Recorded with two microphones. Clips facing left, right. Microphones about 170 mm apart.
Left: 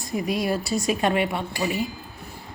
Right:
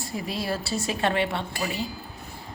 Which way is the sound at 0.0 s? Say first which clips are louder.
Left 5 dB; 15° left (ahead or behind).